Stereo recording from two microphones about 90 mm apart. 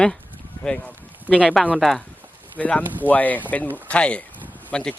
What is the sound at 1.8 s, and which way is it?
Speech, 5° left (ahead or behind).